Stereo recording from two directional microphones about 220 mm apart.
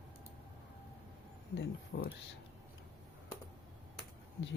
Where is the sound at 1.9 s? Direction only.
40° left (ahead or behind).